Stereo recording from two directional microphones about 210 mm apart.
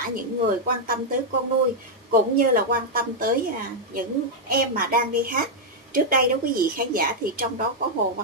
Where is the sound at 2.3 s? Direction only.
40° right (ahead or behind).